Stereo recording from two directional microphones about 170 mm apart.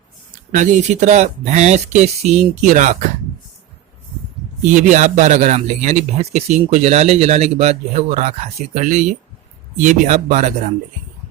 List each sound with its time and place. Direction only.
0.5 s a man's voice: 45° right (ahead or behind)
4.7 s a man's voice: 45° right (ahead or behind)